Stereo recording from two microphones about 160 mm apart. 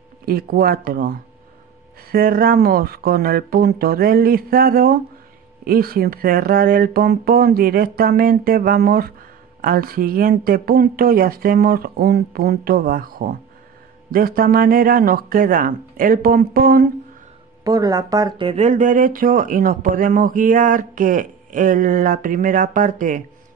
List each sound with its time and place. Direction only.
0.2 s speech: 65° right (ahead or behind)
17.6 s speech: 20° right (ahead or behind)
18.5 s speech: 45° right (ahead or behind)